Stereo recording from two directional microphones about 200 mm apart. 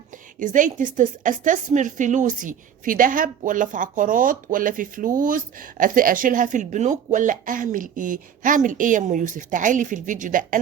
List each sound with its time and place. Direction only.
0.3 s a woman's voice: 40° right (ahead or behind)